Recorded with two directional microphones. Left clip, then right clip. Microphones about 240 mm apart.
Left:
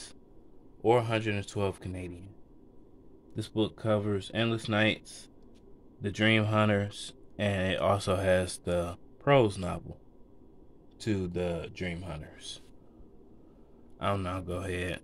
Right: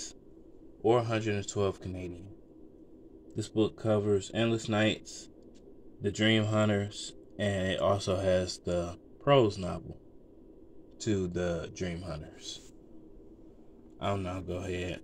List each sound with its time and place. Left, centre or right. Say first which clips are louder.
0.8 s speech: left 1 dB; left
3.3 s speech: right 2 dB; centre
11.0 s speech: right 1 dB; centre
13.9 s speech: left 2 dB; centre